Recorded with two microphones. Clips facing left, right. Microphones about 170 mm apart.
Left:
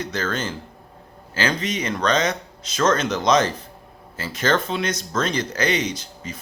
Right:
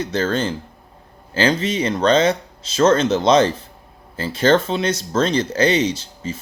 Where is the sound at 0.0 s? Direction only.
30° right (ahead or behind).